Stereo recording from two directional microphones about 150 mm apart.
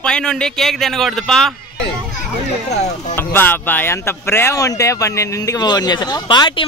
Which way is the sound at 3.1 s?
15° left (ahead or behind).